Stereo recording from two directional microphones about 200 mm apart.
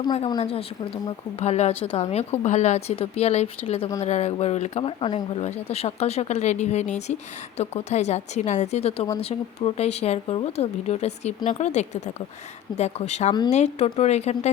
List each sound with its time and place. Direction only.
0.0 s a woman's voice: 25° left (ahead or behind)